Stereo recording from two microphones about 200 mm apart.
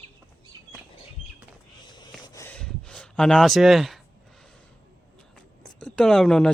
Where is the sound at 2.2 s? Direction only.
15° left (ahead or behind); by 4.0 s centre (ahead or behind).